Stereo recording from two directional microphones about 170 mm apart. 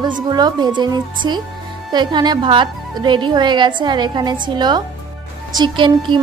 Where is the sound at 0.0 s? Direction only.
25° right (ahead or behind).